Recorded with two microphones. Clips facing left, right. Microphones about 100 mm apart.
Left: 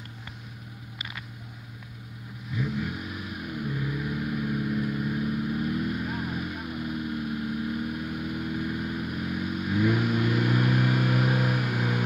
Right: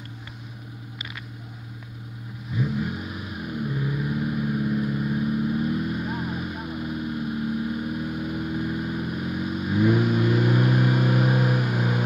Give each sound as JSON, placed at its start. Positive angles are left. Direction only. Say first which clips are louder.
{"t": 2.5, "sound": "vehicle", "louder": "right 3 dB", "side_deg": -25}